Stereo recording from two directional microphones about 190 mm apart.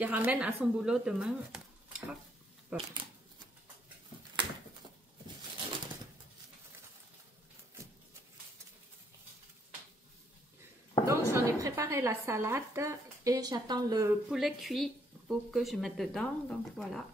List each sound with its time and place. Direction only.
0.0 s speech: 10° right (ahead or behind)
11.1 s a woman's voice: 15° right (ahead or behind)
14.3 s a woman's voice: centre (ahead or behind)